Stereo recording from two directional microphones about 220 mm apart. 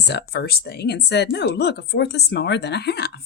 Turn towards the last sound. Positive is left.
turn(degrees=50)  # may be behind; listen again after turning